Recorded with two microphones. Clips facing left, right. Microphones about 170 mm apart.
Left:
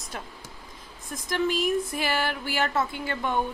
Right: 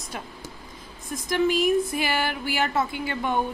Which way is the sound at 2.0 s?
5° right (ahead or behind).